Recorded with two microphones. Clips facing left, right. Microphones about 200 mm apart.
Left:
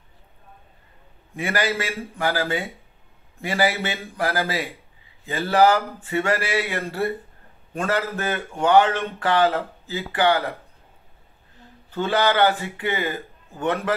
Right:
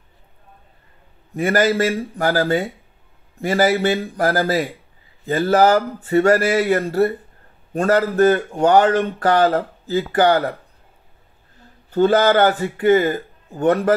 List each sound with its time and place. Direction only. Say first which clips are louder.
1.3 s speech: right 7 dB; 40° right (ahead or behind)
11.9 s speech: right 7 dB; 45° right (ahead or behind)